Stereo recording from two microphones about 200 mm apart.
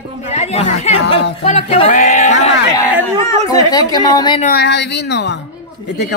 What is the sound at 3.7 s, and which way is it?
Speech, 20° left (ahead or behind).